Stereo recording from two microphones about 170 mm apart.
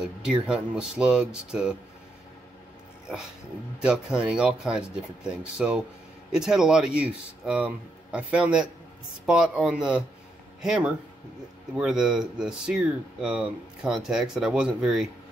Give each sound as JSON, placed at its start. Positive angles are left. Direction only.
{"t": 0.0, "sound": "speech", "side_deg": -5}
{"t": 3.8, "sound": "speech", "side_deg": -5}